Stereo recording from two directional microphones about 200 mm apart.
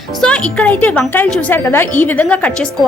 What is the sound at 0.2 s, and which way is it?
A woman's voice, 5° left (ahead or behind).